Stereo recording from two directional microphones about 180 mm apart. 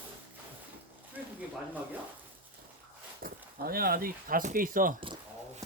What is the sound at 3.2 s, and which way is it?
Speech, 55° right (ahead or behind).